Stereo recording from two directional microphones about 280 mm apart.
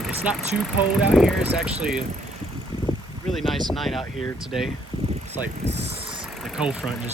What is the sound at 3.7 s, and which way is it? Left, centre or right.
Speech, centre.